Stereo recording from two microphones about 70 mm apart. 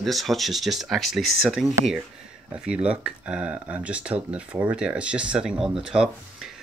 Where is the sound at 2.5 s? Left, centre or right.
Centre.